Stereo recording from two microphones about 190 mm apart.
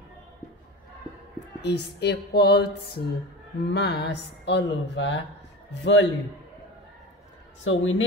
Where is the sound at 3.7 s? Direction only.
60° left (ahead or behind).